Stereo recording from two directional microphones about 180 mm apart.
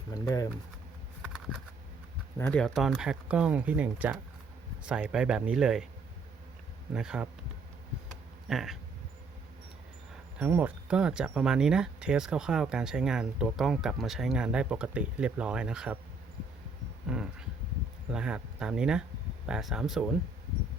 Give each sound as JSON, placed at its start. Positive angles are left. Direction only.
{"t": 0.1, "sound": "speech", "side_deg": 20}
{"t": 1.2, "sound": "a sound", "side_deg": 0}
{"t": 2.4, "sound": "speech", "side_deg": 5}
{"t": 6.9, "sound": "speech", "side_deg": -5}
{"t": 8.4, "sound": "speech", "side_deg": 0}
{"t": 10.3, "sound": "speech", "side_deg": -10}
{"t": 17.1, "sound": "a sound", "side_deg": -5}
{"t": 18.1, "sound": "speech", "side_deg": -5}